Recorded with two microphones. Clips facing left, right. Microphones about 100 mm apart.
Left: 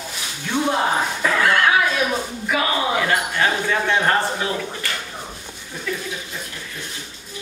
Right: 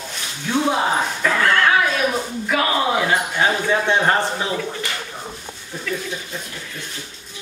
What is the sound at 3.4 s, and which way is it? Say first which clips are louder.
Speech: right 2 dB; 20° right (ahead or behind).